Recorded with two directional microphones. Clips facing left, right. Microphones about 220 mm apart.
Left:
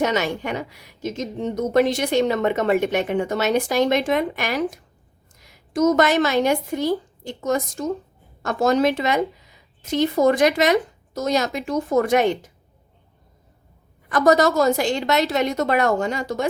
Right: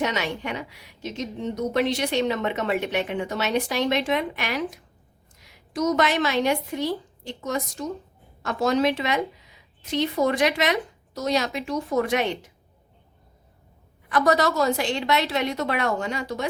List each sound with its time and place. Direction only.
0.0 s a woman's voice: 45° left (ahead or behind)
14.1 s a woman's voice: 45° left (ahead or behind)